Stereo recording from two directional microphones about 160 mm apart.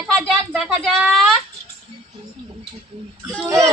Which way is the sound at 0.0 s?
5° left (ahead or behind).